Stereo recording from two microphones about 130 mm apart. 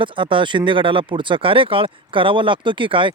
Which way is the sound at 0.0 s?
40° right (ahead or behind).